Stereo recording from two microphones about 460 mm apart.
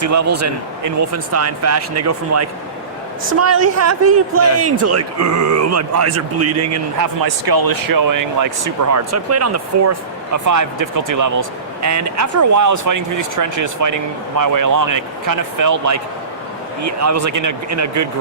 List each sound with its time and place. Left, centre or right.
0.0 s speech: right
7.2 s speech: right